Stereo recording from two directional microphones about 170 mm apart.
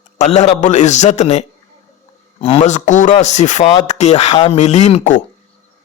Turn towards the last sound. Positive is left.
turn(degrees=45)  # may be behind; listen again after turning